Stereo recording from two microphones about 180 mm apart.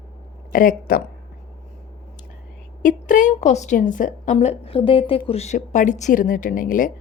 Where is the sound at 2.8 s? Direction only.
45° left (ahead or behind).